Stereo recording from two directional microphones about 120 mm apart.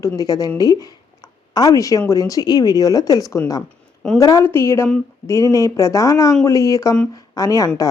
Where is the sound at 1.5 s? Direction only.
30° left (ahead or behind).